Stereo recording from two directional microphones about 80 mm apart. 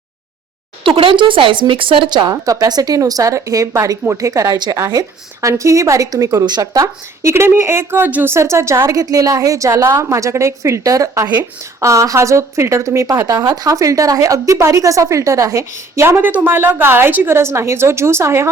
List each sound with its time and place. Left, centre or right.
0.9 s speech: right
2.3 s a woman's voice: right